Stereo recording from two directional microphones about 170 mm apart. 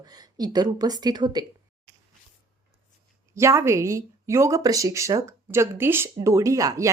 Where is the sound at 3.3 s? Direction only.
15° right (ahead or behind).